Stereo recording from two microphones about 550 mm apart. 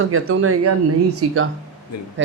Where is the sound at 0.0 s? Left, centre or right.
Right.